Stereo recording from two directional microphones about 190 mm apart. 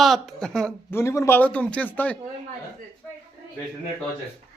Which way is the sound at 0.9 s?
15° left (ahead or behind).